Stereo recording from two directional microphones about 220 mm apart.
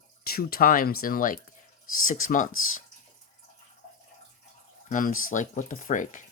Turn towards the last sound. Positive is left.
turn(degrees=35)  # may be behind; listen again after turning